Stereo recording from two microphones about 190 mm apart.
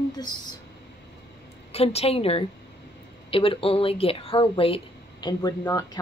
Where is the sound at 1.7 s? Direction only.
30° left (ahead or behind).